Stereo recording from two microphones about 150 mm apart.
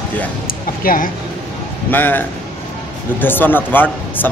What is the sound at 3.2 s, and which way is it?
Speech, 15° left (ahead or behind).